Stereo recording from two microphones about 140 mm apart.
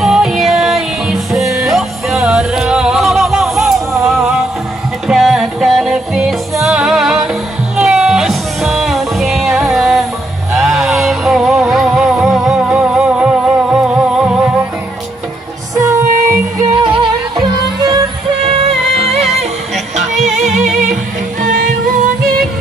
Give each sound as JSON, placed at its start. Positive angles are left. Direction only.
{"t": 0.0, "sound": "music", "side_deg": 0}
{"t": 15.8, "sound": "music", "side_deg": -20}
{"t": 17.7, "sound": "music", "side_deg": -30}
{"t": 20.3, "sound": "music", "side_deg": -55}
{"t": 20.8, "sound": "music", "side_deg": -70}